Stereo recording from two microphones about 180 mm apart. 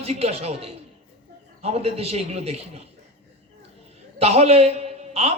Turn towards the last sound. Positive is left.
turn(degrees=-35)  # may be behind; listen again after turning